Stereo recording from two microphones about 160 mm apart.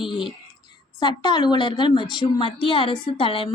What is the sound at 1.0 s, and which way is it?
A woman's voice, 30° left (ahead or behind).